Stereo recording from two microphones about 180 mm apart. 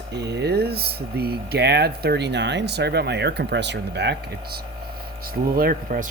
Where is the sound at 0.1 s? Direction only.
70° right (ahead or behind).